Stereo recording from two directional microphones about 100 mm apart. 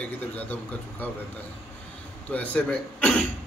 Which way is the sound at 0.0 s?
15° left (ahead or behind).